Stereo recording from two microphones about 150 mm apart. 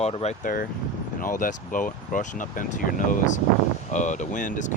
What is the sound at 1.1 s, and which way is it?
Speech, 65° left (ahead or behind).